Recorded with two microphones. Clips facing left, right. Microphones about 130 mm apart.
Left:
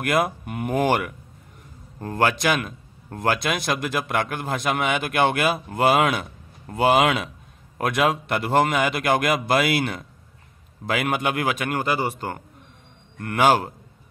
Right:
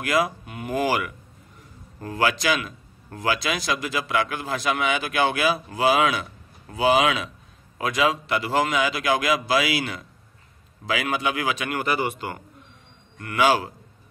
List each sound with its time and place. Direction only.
0.0 s a man's voice: 55° left (ahead or behind)
11.8 s a man's voice: 35° left (ahead or behind); by 13.7 s 50° left (ahead or behind)